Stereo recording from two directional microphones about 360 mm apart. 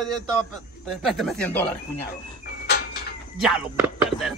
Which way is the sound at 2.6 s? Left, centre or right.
Left.